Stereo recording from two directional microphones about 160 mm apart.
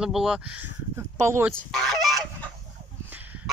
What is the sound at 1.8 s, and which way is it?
Goose, centre (ahead or behind).